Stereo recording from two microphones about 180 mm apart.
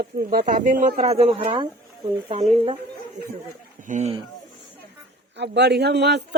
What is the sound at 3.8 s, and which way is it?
Speech, 40° right (ahead or behind).